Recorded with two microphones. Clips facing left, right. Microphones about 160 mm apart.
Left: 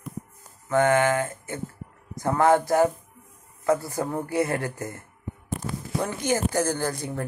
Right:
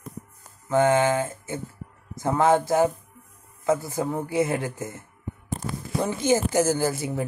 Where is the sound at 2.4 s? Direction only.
20° right (ahead or behind).